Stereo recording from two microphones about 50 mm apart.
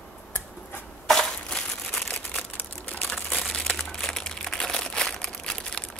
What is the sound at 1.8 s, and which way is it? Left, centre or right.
Crumpling, centre.